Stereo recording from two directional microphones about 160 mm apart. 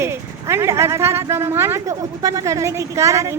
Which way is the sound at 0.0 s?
15° right (ahead or behind).